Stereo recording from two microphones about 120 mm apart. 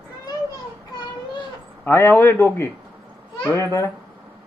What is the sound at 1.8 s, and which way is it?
A man's voice, 15° left (ahead or behind).